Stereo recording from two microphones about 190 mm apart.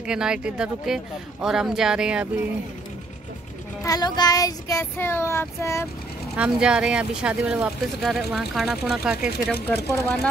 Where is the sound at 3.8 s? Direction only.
20° left (ahead or behind).